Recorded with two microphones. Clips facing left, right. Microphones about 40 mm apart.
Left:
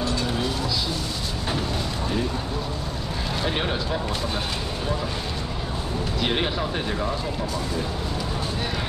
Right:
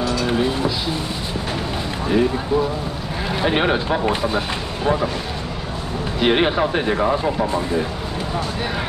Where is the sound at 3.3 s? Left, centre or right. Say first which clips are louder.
Right 8 dB; right.